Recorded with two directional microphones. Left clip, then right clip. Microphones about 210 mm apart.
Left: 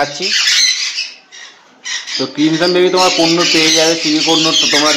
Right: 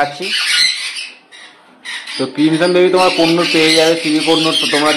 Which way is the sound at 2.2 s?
Centre (ahead or behind).